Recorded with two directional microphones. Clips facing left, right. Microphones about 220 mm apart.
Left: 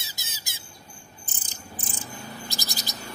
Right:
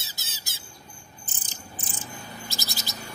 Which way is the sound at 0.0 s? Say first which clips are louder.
Even; 15° left (ahead or behind).